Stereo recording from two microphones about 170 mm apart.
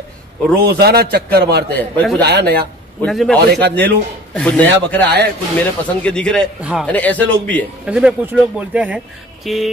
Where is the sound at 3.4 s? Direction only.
75° right (ahead or behind).